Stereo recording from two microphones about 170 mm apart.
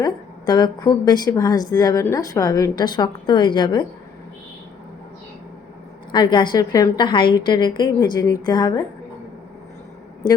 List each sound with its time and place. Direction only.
0.0 s a woman's voice: 25° left (ahead or behind)
6.1 s a woman's voice: 25° left (ahead or behind)